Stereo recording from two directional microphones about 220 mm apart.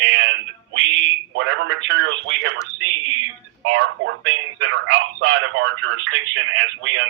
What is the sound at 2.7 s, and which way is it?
Speech, 70° right (ahead or behind).